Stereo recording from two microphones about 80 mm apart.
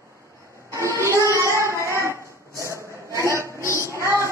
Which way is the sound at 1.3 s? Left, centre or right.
Right.